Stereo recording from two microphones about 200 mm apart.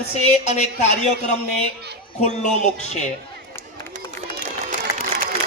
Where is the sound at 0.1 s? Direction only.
35° left (ahead or behind).